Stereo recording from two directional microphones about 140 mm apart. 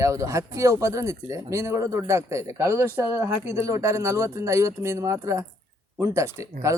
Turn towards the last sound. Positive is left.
turn(degrees=-20)  # may be behind; listen again after turning